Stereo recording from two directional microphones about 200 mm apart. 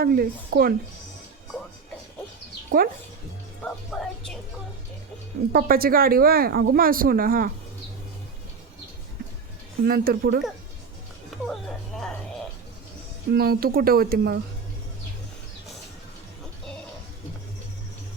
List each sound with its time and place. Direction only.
0.0 s speech: 50° right (ahead or behind)
2.7 s speech: 45° right (ahead or behind)
3.6 s speech: 5° left (ahead or behind)
5.5 s speech: 45° right (ahead or behind)
9.8 s speech: 50° right (ahead or behind)
13.3 s speech: 50° right (ahead or behind)